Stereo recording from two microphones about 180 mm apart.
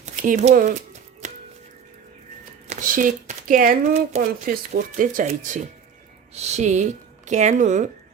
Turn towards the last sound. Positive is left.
turn(degrees=-45)  # may be behind; listen again after turning